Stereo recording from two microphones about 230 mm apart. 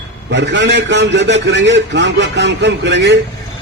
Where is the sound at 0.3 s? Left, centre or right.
Right.